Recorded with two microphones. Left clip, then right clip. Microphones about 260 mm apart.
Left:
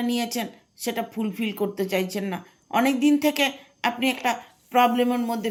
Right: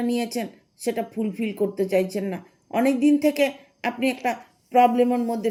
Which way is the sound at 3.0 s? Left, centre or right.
Left.